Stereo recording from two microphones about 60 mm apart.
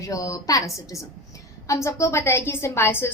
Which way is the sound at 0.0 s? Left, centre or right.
Left.